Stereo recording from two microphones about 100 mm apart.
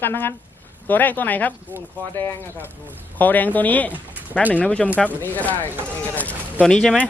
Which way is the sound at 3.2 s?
15° left (ahead or behind).